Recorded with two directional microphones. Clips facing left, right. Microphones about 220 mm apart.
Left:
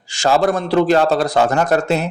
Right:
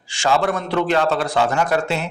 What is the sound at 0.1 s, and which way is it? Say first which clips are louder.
A man's voice: left 4 dB; 40° left (ahead or behind).